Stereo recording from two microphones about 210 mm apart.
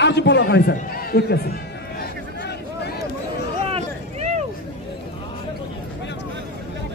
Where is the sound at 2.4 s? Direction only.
55° left (ahead or behind).